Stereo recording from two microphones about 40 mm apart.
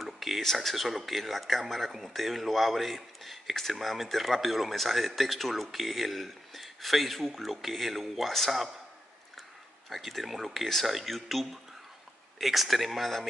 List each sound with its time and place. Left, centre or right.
0.0 s a sound: centre
0.4 s speech: centre
9.8 s speech: centre